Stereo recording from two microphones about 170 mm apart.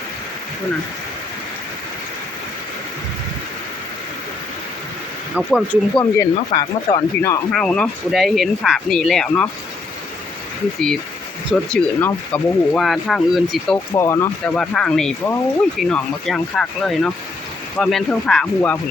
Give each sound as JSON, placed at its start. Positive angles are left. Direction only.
{"t": 5.3, "sound": "speech", "side_deg": 0}
{"t": 6.0, "sound": "speech", "side_deg": 20}
{"t": 7.5, "sound": "speech", "side_deg": 5}
{"t": 11.7, "sound": "speech", "side_deg": 10}
{"t": 13.9, "sound": "speech", "side_deg": 15}